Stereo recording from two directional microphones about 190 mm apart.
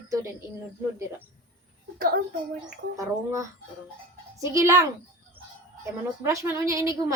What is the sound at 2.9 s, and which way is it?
A woman's voice, 15° right (ahead or behind).